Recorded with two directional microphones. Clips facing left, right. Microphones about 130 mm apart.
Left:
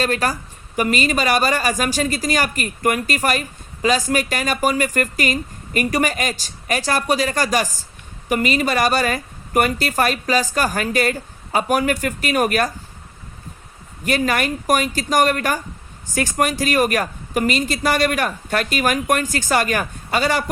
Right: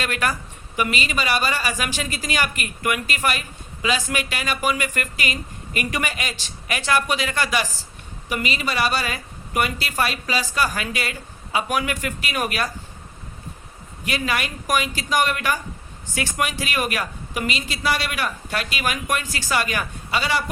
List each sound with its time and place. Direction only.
0.0 s speech: 35° left (ahead or behind)
14.0 s speech: 45° left (ahead or behind)